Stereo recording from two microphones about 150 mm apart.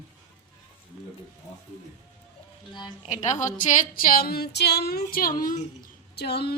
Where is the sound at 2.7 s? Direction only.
30° left (ahead or behind).